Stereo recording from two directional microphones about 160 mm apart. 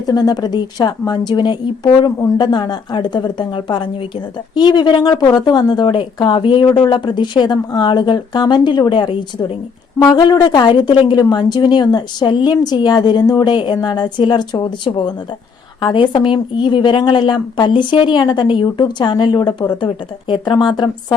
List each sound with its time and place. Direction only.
0.0 s a woman's voice: 25° left (ahead or behind)